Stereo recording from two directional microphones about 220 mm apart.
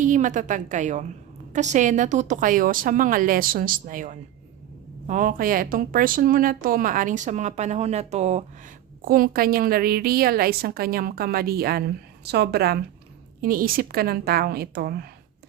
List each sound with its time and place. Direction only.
0.0 s a woman's voice: 35° right (ahead or behind)